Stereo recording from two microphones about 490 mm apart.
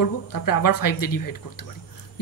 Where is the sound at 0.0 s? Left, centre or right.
Left.